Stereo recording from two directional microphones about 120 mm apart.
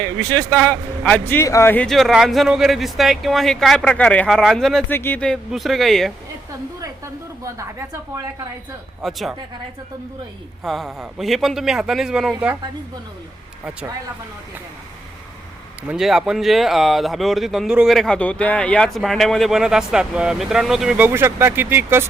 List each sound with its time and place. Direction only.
0.2 s speech: 10° left (ahead or behind)
1.7 s speech: 10° left (ahead or behind)
2.0 s speech: centre (ahead or behind)
4.9 s speech: 15° left (ahead or behind)
5.5 s speech: centre (ahead or behind)
6.8 s a sound: 25° right (ahead or behind)
9.0 s speech: centre (ahead or behind)
10.6 s speech: centre (ahead or behind)
15.9 s speech: 5° right (ahead or behind)